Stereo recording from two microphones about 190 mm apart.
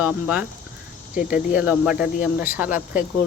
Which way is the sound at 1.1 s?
45° left (ahead or behind).